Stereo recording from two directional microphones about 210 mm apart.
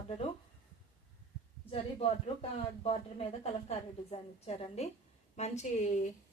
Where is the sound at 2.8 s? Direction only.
30° left (ahead or behind).